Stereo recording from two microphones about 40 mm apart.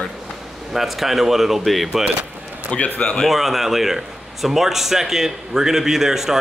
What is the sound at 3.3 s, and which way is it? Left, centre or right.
A man's voice, centre.